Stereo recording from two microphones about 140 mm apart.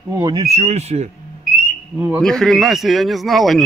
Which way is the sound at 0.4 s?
50° right (ahead or behind).